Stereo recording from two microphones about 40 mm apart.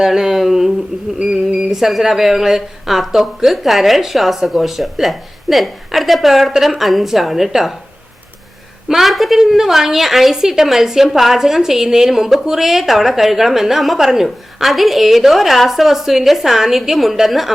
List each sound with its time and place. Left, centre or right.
0.0 s a woman's voice: centre
8.9 s a woman's voice: centre